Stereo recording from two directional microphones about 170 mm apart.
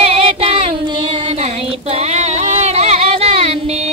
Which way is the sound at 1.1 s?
40° right (ahead or behind).